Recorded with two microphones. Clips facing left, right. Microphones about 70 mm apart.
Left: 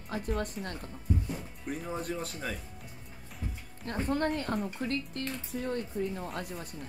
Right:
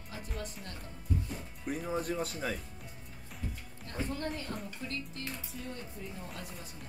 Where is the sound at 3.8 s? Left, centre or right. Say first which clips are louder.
Left 7 dB; left.